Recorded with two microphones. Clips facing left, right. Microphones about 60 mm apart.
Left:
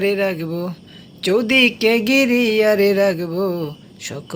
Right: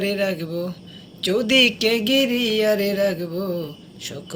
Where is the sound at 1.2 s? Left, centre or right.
Left.